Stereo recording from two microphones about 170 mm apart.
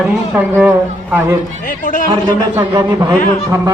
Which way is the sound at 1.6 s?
50° left (ahead or behind).